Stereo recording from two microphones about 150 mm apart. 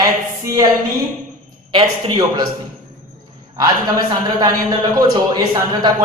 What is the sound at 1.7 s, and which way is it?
Speech, 30° right (ahead or behind).